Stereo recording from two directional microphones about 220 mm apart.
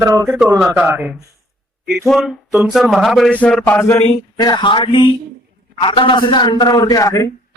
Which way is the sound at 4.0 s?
25° left (ahead or behind).